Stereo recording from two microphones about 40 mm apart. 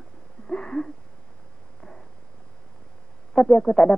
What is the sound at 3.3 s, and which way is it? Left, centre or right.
Speech, centre.